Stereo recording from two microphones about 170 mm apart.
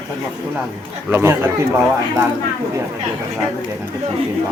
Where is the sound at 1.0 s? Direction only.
15° right (ahead or behind).